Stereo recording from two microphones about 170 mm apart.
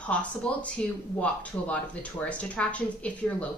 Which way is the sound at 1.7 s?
10° left (ahead or behind).